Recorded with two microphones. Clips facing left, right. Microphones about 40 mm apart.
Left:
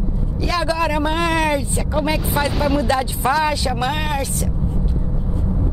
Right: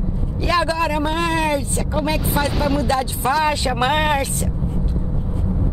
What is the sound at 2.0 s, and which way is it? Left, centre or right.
Speech, centre.